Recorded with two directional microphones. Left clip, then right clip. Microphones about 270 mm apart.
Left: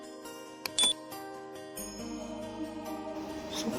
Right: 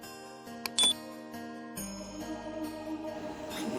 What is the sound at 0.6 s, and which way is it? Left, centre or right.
Music, centre.